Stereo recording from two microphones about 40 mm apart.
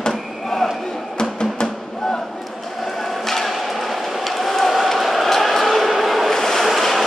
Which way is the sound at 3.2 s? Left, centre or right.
Centre.